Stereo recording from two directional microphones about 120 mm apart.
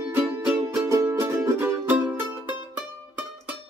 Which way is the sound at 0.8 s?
25° right (ahead or behind).